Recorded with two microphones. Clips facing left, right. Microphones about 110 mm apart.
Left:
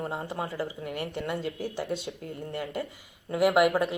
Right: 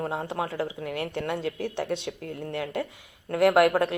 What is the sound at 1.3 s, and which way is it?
Speech, 65° right (ahead or behind).